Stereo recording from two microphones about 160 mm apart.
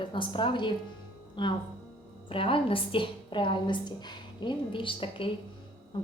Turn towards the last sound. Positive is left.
turn(degrees=30)  # may be behind; listen again after turning